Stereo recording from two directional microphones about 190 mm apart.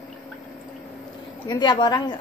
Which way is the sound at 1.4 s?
25° left (ahead or behind).